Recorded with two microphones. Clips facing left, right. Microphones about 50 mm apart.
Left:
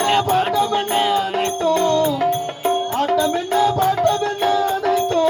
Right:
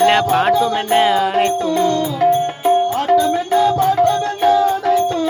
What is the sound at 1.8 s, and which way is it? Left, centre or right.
Music, centre.